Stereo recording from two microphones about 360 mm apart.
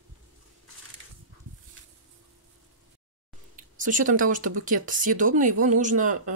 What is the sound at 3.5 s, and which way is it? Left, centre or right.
Speech, right.